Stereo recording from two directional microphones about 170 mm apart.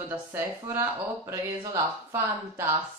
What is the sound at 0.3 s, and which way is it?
Speech, 15° right (ahead or behind).